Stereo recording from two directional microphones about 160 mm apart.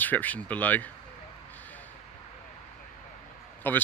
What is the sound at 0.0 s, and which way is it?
Speech, 10° left (ahead or behind).